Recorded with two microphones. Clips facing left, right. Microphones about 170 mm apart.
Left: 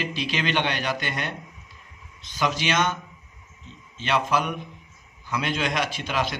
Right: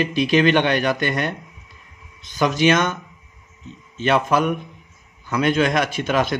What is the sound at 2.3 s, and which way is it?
Speech, 50° right (ahead or behind).